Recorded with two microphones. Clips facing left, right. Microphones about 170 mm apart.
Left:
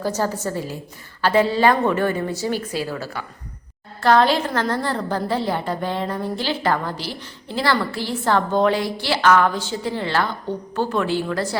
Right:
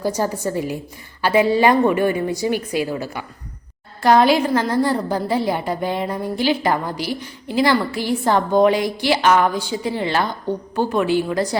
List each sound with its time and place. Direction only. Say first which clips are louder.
0.0 s a woman's voice: right 2 dB; 15° right (ahead or behind)